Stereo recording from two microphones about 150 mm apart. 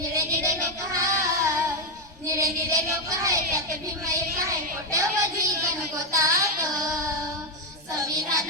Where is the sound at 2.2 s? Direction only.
20° right (ahead or behind).